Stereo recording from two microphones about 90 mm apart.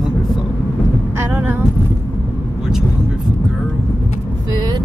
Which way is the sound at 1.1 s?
25° right (ahead or behind).